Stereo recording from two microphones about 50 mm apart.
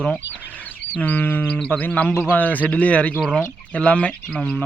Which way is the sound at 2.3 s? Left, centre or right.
Left.